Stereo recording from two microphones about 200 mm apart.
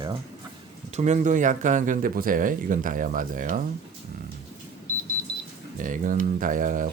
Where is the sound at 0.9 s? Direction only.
35° right (ahead or behind).